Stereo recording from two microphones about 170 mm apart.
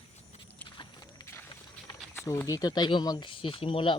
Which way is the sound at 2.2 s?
15° left (ahead or behind).